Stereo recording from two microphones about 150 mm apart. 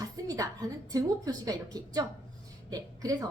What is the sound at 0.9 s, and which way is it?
A woman's voice, 25° right (ahead or behind).